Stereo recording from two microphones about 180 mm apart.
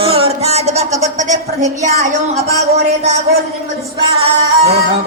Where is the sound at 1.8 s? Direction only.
40° right (ahead or behind).